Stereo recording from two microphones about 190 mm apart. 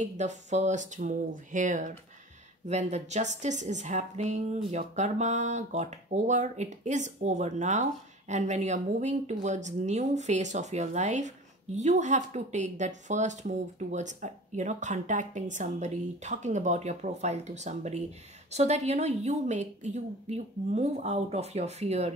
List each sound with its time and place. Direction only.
0.0 s speech: 40° right (ahead or behind)